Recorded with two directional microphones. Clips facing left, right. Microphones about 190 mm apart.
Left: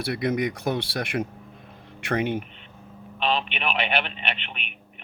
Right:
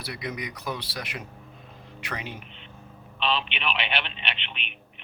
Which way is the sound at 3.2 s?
45° left (ahead or behind).